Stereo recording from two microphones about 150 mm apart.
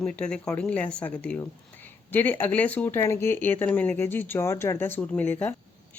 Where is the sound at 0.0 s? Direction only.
5° left (ahead or behind).